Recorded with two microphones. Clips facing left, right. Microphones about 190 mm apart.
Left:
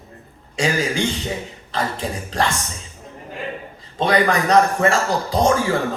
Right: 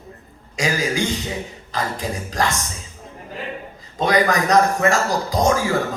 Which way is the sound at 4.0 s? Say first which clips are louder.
Even; 30° left (ahead or behind).